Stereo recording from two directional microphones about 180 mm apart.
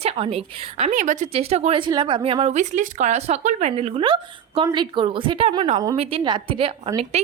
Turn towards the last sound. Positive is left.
turn(degrees=-35)  # may be behind; listen again after turning